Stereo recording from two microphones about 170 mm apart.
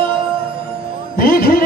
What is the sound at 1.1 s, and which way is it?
Music, 60° left (ahead or behind).